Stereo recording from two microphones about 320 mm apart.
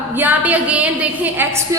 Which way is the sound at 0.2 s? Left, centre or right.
Centre.